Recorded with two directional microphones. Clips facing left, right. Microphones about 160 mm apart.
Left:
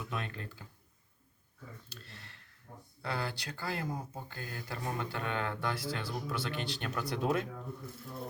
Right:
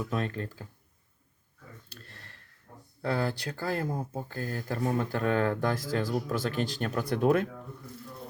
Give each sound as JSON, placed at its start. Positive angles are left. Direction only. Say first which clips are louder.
{"t": 0.0, "sound": "speech", "louder": "right 8 dB", "side_deg": -40}
{"t": 1.9, "sound": "speech", "louder": "right 1 dB", "side_deg": -50}